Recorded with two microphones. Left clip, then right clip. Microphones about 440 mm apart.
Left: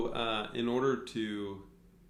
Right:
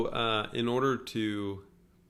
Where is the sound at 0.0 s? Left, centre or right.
Right.